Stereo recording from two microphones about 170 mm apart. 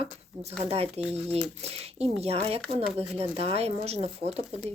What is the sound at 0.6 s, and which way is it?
Speech, 40° right (ahead or behind).